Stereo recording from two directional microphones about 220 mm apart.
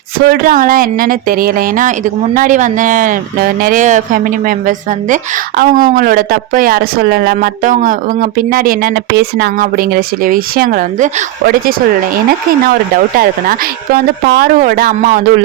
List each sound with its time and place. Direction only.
0.2 s speech: 40° right (ahead or behind)
13.1 s speech: 40° right (ahead or behind)